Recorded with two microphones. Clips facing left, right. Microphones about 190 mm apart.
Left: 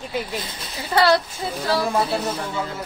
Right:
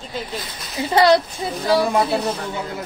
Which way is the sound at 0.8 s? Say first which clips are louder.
Right 3 dB; 20° right (ahead or behind).